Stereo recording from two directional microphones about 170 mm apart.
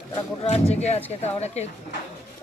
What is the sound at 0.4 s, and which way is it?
Speech, 40° left (ahead or behind).